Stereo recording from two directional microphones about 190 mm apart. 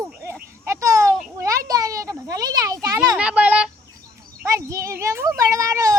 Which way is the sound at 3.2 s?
5° right (ahead or behind).